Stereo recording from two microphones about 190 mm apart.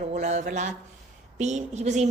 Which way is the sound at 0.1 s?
35° right (ahead or behind).